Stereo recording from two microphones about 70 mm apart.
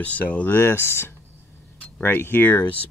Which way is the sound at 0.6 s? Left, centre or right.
Left.